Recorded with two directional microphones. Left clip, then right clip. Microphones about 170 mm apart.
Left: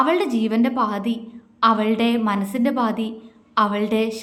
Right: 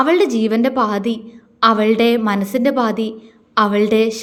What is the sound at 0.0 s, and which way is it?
A woman's voice, 20° right (ahead or behind).